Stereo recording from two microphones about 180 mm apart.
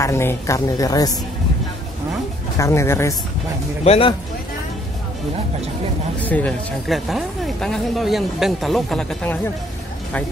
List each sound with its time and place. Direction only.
0.0 s speech: 15° left (ahead or behind)
2.5 s speech: 15° left (ahead or behind)
3.8 s speech: 35° left (ahead or behind)
6.2 s speech: 10° left (ahead or behind)